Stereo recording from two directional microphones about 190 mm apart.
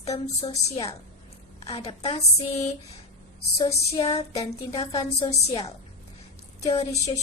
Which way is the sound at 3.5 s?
35° left (ahead or behind).